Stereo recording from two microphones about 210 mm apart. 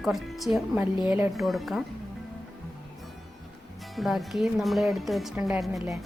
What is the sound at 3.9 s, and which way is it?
Speech, centre (ahead or behind).